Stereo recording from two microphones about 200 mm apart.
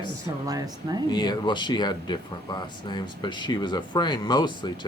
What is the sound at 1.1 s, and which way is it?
Speech, 20° left (ahead or behind).